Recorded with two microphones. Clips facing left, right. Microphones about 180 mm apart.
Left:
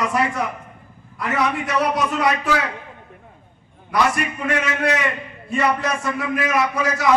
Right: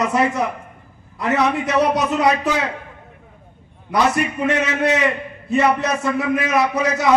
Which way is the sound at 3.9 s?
20° right (ahead or behind).